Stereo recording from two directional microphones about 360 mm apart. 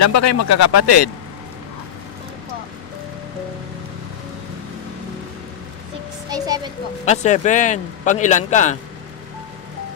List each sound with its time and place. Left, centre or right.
0.0 s speech: left
6.3 s music: centre
7.0 s speech: centre